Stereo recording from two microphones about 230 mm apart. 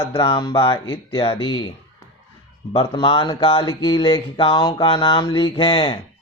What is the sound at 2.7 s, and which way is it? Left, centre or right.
Speech, left.